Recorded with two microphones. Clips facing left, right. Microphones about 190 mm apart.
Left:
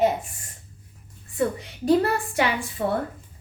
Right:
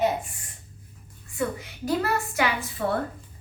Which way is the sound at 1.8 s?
30° left (ahead or behind).